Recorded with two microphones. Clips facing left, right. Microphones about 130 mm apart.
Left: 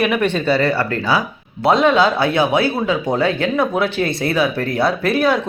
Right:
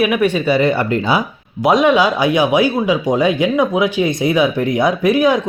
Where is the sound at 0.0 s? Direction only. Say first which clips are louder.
Right 2 dB; 10° right (ahead or behind).